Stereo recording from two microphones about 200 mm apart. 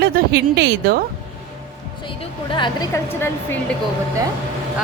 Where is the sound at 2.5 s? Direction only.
25° left (ahead or behind).